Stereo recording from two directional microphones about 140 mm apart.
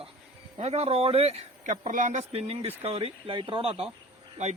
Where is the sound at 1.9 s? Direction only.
60° right (ahead or behind); by 3.8 s 45° right (ahead or behind).